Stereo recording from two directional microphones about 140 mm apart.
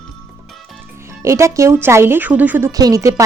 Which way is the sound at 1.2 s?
20° right (ahead or behind).